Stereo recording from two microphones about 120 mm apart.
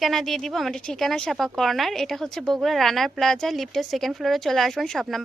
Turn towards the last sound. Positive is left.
turn(degrees=0)  # may be behind; listen again after turning